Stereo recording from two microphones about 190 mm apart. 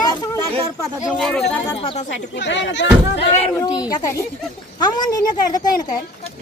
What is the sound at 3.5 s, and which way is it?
Speech, 20° left (ahead or behind).